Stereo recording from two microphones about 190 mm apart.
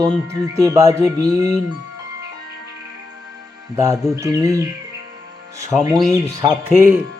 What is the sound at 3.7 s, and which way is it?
Speech, 15° right (ahead or behind).